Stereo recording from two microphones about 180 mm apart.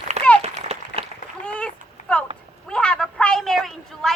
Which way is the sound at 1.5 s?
5° left (ahead or behind).